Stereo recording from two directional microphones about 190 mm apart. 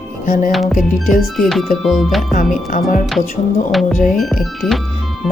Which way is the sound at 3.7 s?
Centre (ahead or behind).